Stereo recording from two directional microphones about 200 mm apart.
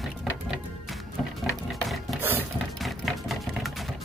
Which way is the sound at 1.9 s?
5° right (ahead or behind).